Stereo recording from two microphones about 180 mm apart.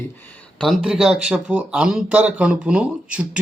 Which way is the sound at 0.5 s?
Centre (ahead or behind).